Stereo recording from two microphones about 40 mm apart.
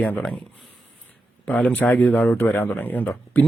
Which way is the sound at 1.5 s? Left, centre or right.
Left.